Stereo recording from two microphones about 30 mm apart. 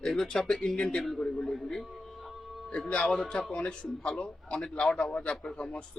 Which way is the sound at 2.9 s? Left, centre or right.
Left.